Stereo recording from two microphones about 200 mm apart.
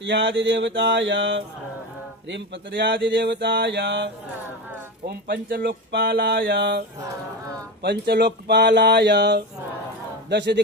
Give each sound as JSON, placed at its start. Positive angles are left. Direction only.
{"t": 0.0, "sound": "speech", "side_deg": -65}
{"t": 5.0, "sound": "speech", "side_deg": -45}